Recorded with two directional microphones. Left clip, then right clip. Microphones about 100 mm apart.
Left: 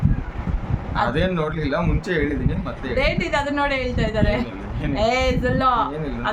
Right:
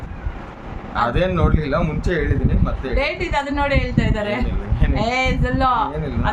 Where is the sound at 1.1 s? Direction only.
45° right (ahead or behind).